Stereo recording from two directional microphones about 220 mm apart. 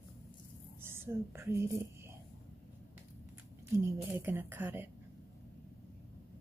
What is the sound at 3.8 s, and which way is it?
A woman's voice, 10° right (ahead or behind).